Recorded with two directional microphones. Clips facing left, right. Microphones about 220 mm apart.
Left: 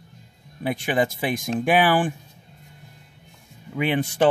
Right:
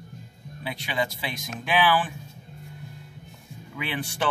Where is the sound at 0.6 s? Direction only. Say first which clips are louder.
Left 7 dB; 50° left (ahead or behind).